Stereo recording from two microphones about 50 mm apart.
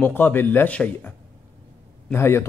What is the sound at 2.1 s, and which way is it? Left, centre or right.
Speech, left.